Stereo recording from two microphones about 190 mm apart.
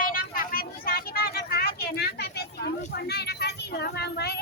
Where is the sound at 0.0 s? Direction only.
50° left (ahead or behind).